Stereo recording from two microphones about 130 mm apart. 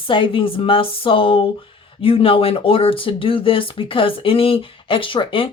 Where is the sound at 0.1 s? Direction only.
40° left (ahead or behind).